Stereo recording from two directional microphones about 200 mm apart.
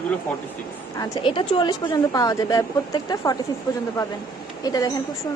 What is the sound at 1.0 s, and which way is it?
Speech, 20° left (ahead or behind).